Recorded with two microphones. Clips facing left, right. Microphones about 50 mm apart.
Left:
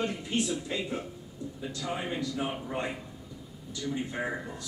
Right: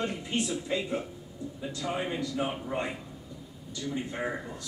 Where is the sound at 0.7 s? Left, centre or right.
Centre.